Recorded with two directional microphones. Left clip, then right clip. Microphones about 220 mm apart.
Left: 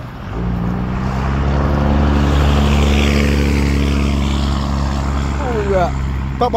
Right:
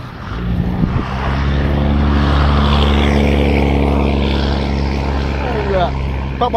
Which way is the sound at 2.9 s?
20° right (ahead or behind).